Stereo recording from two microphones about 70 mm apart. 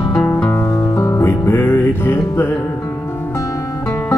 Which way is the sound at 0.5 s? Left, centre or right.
Left.